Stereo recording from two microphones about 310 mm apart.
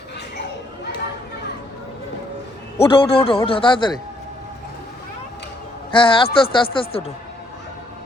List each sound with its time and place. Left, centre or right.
2.7 s a man's voice: centre
5.9 s a man's voice: centre